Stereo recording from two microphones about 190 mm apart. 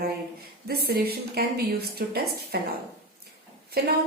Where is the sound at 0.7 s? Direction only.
55° right (ahead or behind).